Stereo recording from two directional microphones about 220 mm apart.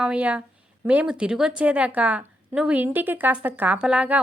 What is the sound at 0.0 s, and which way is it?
A woman's voice, 5° right (ahead or behind).